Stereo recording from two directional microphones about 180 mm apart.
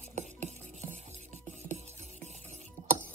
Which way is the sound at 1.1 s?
40° right (ahead or behind).